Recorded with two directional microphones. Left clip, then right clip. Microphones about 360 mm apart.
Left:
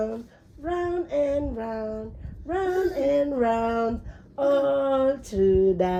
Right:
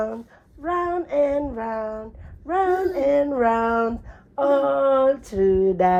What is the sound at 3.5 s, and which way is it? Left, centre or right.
Speech, right.